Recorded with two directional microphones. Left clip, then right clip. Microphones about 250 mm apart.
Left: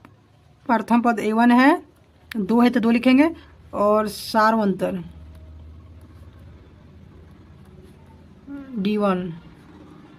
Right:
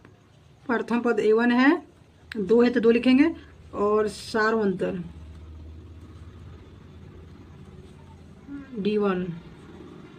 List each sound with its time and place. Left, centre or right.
0.7 s speech: left
8.8 s speech: left